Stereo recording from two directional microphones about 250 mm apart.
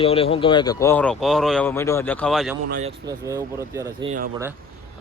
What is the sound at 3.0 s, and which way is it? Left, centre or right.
Speech, centre.